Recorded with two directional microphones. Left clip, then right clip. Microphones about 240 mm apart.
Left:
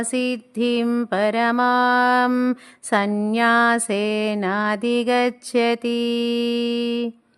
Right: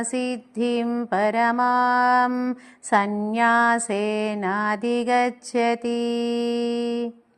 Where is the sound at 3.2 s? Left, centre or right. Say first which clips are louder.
Left 2 dB; left.